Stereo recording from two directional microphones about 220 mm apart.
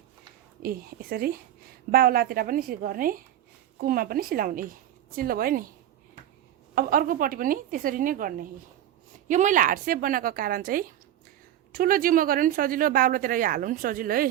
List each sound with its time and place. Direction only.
0.6 s a woman's voice: 45° right (ahead or behind)
6.7 s speech: 40° right (ahead or behind)